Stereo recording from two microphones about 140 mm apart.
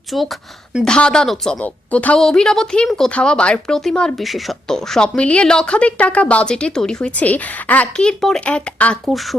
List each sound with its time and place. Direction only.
0.1 s a woman's voice: centre (ahead or behind)